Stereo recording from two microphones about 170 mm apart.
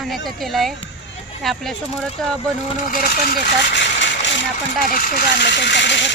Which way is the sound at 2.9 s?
60° left (ahead or behind).